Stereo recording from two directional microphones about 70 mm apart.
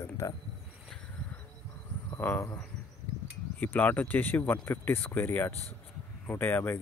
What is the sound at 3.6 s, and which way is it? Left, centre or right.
Speech, left.